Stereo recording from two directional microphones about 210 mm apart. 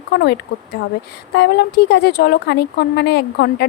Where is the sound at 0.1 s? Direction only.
50° left (ahead or behind).